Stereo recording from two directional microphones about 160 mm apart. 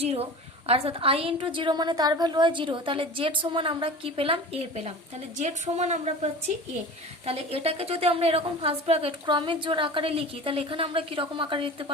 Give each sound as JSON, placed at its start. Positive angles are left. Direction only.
{"t": 0.0, "sound": "a woman's voice", "side_deg": -40}